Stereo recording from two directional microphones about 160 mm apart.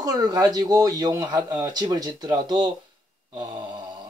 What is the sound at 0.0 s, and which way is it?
Speech, 25° right (ahead or behind).